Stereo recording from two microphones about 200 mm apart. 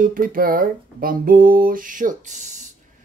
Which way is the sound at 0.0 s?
45° right (ahead or behind).